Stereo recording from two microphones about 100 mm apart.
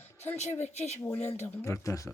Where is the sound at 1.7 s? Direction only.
30° left (ahead or behind).